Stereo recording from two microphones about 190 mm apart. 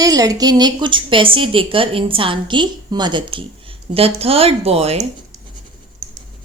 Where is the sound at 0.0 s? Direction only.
20° right (ahead or behind).